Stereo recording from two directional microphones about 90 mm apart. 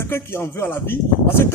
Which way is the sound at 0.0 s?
25° left (ahead or behind).